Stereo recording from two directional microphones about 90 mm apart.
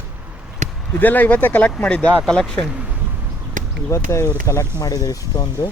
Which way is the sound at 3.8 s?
30° left (ahead or behind).